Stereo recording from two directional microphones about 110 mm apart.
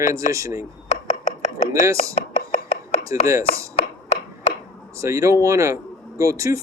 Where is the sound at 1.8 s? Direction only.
30° right (ahead or behind).